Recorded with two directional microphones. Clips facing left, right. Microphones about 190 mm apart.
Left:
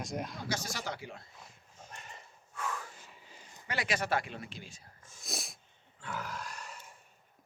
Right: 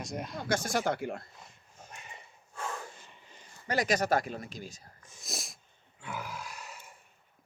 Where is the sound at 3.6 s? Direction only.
40° right (ahead or behind).